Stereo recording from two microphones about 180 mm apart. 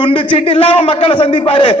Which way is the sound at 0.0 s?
30° left (ahead or behind).